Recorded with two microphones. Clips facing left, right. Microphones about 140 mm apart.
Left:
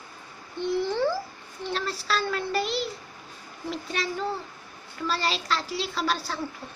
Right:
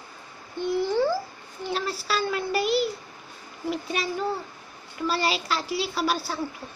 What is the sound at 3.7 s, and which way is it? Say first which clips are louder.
A child's voice: right 2 dB; 10° right (ahead or behind).